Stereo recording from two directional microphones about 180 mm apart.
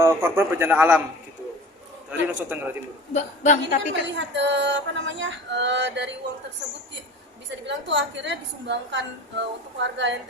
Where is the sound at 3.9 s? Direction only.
90° right.